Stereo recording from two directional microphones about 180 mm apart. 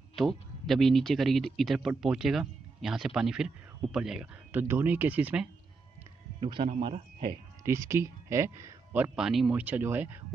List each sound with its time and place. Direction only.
0.1 s speech: centre (ahead or behind)
6.4 s speech: 25° right (ahead or behind)
7.6 s speech: 15° right (ahead or behind)